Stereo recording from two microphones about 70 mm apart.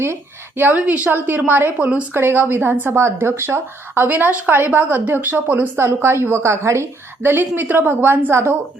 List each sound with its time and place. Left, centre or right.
0.0 s a woman's voice: right
0.8 s speech: centre
1.8 s a woman's voice: centre
2.1 s a woman's voice: right